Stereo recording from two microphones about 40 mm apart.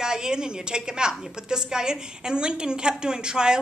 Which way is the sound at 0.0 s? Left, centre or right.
Centre.